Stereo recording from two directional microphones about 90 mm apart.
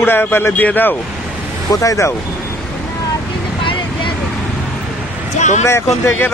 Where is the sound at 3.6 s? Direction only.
70° left (ahead or behind).